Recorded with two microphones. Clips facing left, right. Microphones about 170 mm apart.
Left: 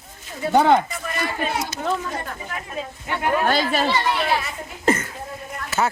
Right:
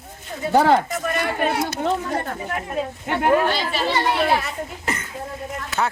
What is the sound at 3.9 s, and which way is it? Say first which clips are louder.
Speech: right 1 dB; 50° right (ahead or behind).